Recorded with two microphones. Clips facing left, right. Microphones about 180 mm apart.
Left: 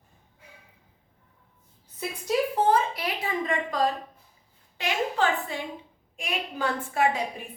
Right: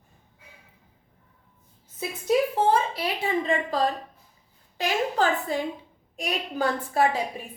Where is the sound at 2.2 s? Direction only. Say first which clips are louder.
Right 2 dB; 25° right (ahead or behind).